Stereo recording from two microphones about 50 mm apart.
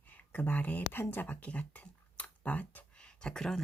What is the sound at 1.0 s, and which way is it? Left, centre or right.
Speech, left.